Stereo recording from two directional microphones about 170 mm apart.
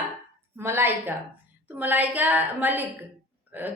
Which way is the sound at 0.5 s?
15° right (ahead or behind).